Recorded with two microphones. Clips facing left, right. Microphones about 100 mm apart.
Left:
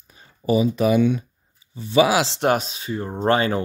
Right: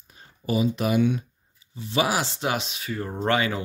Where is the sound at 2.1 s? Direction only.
90° left.